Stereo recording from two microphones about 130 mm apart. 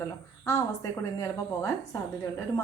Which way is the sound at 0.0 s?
20° left (ahead or behind).